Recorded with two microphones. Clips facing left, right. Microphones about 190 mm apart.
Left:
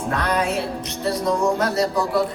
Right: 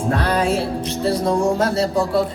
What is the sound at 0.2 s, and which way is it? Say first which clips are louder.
Music: right 3 dB; 30° right (ahead or behind).